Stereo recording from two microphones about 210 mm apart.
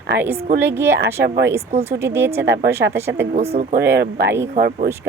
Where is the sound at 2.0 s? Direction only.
10° right (ahead or behind).